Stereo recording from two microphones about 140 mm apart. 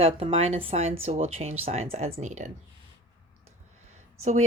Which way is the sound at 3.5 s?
50° right (ahead or behind).